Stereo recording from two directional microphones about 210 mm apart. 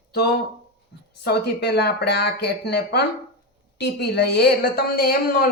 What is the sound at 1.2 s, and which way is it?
A woman's voice, 50° left (ahead or behind).